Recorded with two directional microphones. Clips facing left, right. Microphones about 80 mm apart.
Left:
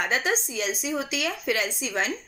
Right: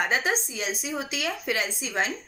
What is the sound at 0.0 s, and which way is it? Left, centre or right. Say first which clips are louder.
A woman's voice: even; right.